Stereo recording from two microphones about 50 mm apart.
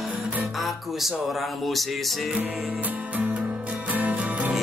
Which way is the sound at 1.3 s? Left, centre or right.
Centre.